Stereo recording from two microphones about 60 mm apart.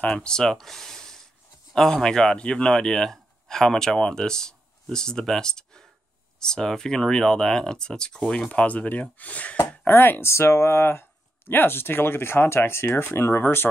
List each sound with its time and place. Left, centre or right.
0.0 s speech: left
0.3 s a man's voice: centre
9.8 s speech: left
10.3 s speech: left